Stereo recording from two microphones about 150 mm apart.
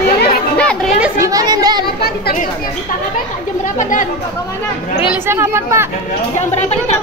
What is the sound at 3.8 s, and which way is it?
Speech, 60° left (ahead or behind).